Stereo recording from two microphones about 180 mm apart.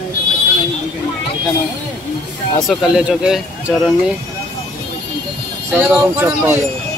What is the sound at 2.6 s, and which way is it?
Speech, centre (ahead or behind).